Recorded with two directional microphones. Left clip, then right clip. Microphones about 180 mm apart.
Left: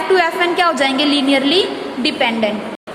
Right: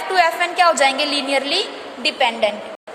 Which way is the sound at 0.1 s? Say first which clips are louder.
Left 2 dB; 25° right (ahead or behind).